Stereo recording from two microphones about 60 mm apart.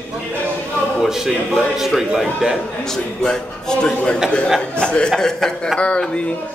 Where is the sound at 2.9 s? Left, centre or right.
Centre.